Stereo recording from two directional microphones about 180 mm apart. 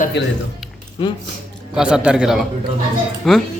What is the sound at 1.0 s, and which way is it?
Speech, 25° left (ahead or behind).